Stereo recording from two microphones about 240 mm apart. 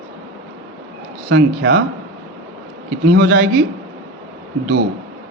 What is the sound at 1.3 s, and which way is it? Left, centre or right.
Speech, right.